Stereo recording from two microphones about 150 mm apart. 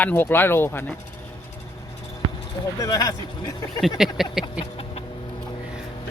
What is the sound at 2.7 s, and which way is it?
Speech, 25° left (ahead or behind).